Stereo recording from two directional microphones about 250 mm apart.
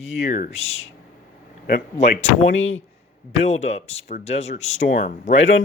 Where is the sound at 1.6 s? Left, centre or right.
Left.